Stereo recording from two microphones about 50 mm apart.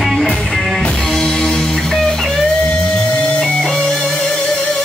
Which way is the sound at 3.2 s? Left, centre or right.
Centre.